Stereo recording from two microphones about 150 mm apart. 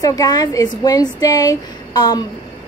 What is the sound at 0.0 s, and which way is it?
A woman's voice, 25° left (ahead or behind).